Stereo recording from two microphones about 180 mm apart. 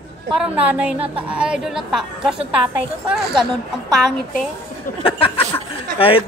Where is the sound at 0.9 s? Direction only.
30° right (ahead or behind).